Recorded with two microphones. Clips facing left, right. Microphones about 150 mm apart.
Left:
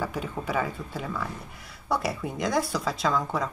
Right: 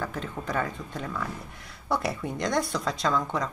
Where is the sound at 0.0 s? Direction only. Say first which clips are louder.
Left 2 dB; 10° left (ahead or behind).